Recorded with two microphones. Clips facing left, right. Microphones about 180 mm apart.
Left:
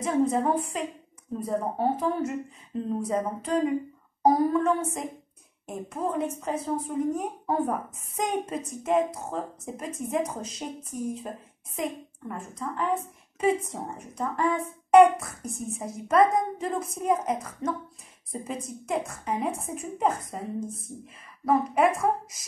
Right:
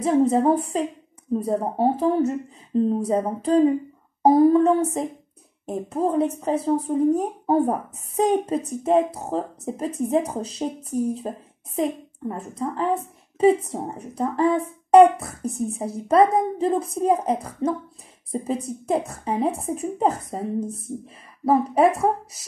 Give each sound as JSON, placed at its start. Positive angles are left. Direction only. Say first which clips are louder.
{"t": 0.0, "sound": "speech", "louder": "right 6 dB", "side_deg": -30}